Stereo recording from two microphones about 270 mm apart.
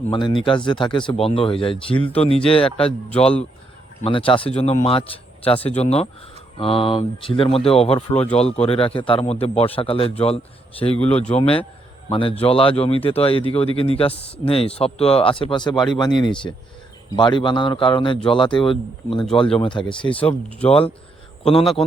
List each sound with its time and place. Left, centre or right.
0.1 s a man's voice: centre
2.7 s speech: centre
4.0 s a man's voice: centre
8.1 s speech: centre
8.4 s a man's voice: left
11.0 s speech: centre
11.3 s a man's voice: left
20.1 s speech: centre
20.7 s a man's voice: left